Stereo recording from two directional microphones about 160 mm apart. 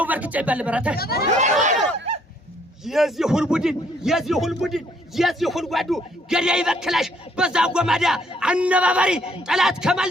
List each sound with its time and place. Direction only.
0.0 s speech: 10° right (ahead or behind)
0.9 s speech: 75° left (ahead or behind)
1.4 s crowd: 50° right (ahead or behind)
2.8 s a man's voice: centre (ahead or behind)